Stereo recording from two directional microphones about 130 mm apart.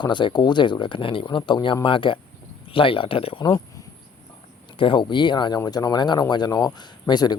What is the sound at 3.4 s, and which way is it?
Speech, 30° left (ahead or behind).